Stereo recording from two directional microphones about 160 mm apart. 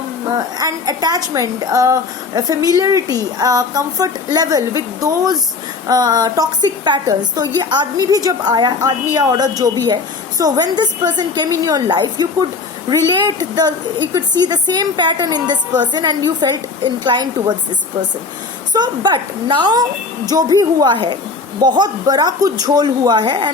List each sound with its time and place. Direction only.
0.3 s a woman's voice: 25° right (ahead or behind)
18.7 s a woman's voice: 25° right (ahead or behind)